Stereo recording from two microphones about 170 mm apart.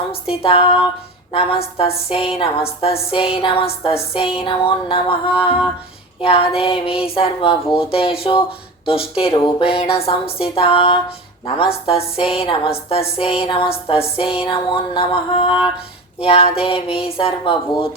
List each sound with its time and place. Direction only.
0.1 s music: 35° left (ahead or behind)